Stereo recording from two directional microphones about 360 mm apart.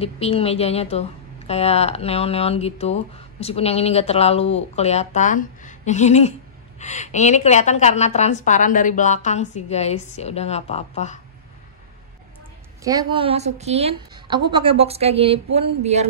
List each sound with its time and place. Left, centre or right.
0.0 s a woman's voice: centre
12.8 s a woman's voice: centre